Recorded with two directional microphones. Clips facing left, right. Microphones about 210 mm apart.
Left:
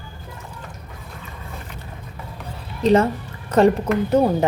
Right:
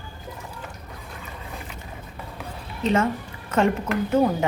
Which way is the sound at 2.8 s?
35° left (ahead or behind).